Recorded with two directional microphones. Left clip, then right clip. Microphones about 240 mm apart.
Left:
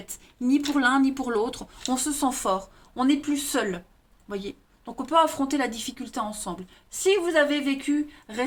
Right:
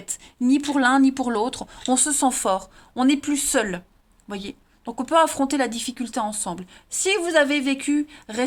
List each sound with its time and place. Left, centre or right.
0.0 s speech: right